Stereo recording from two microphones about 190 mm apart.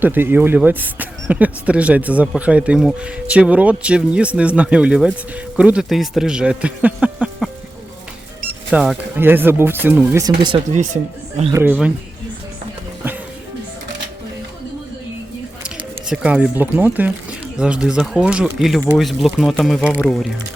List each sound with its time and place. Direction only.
0.0 s a man's voice: 10° right (ahead or behind)
8.7 s speech: 5° right (ahead or behind)
10.8 s speech: 40° right (ahead or behind)
11.5 s speech: 10° right (ahead or behind)
16.0 s a man's voice: 5° right (ahead or behind)